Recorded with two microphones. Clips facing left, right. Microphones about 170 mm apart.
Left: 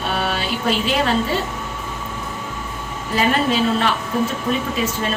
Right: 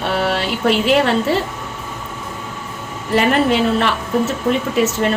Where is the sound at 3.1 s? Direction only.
70° right (ahead or behind).